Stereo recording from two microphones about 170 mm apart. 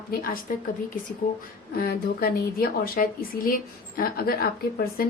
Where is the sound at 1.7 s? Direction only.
60° left (ahead or behind).